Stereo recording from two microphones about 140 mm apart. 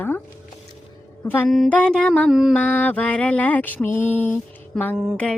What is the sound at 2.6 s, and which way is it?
Mantra, 10° left (ahead or behind).